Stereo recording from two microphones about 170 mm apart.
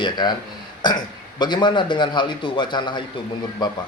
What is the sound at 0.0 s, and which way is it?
A man's voice, 25° left (ahead or behind).